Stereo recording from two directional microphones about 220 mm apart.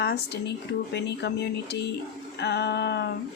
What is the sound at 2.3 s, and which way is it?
Speech, 50° left (ahead or behind).